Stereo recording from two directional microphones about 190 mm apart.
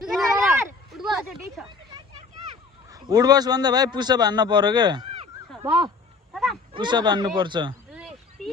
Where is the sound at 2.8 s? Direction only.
20° right (ahead or behind).